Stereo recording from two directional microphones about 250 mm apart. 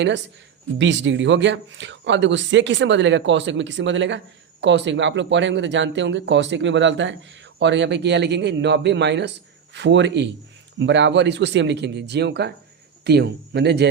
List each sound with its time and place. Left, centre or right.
0.8 s speech: right